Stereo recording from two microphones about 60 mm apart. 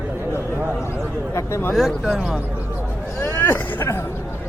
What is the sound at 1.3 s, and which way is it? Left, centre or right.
Speech, left.